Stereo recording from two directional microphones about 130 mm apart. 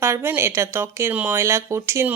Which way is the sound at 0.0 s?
20° right (ahead or behind).